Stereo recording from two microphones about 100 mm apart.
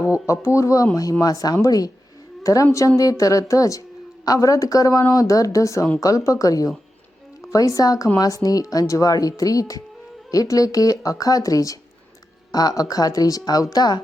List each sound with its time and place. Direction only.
0.3 s a woman's voice: 30° left (ahead or behind)